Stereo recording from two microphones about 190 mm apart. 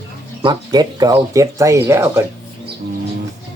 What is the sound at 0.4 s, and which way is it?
Speech, 20° right (ahead or behind).